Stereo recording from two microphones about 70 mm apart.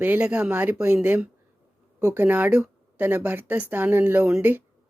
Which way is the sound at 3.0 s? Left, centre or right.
Right.